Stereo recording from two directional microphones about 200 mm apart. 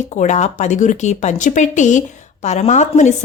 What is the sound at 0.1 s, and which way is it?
Speech, 35° left (ahead or behind).